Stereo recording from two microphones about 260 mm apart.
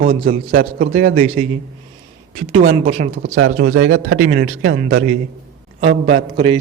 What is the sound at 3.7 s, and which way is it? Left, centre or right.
Speech, right.